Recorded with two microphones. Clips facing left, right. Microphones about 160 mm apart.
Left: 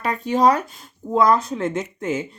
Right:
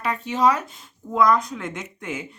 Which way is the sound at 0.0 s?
40° left (ahead or behind).